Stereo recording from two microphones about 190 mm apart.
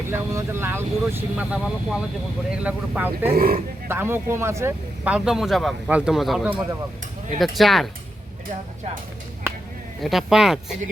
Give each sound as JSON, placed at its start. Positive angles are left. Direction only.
{"t": 0.1, "sound": "speech", "side_deg": -10}
{"t": 3.3, "sound": "speech", "side_deg": -50}
{"t": 3.8, "sound": "speech", "side_deg": -10}
{"t": 10.0, "sound": "speech", "side_deg": 0}